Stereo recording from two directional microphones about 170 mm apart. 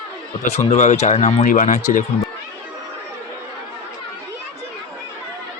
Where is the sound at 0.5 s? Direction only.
45° left (ahead or behind).